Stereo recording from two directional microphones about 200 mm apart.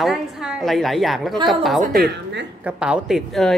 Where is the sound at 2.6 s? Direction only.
5° right (ahead or behind).